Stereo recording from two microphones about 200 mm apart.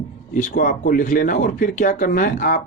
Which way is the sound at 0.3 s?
40° left (ahead or behind).